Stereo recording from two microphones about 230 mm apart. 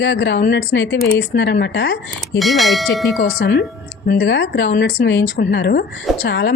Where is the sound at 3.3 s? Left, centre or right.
Left.